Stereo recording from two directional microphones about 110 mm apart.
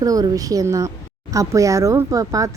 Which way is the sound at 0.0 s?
35° right (ahead or behind).